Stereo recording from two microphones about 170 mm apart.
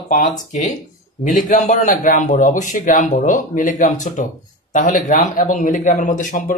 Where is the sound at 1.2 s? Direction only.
50° left (ahead or behind).